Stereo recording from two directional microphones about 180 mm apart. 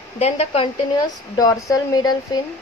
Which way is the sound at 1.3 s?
20° left (ahead or behind).